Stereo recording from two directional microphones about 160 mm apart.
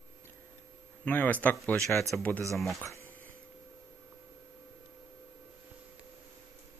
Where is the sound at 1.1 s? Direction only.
10° left (ahead or behind).